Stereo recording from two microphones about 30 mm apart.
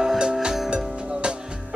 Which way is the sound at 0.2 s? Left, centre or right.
Right.